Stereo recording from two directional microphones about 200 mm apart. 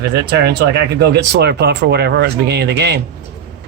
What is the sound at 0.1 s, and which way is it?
Speech, 55° right (ahead or behind).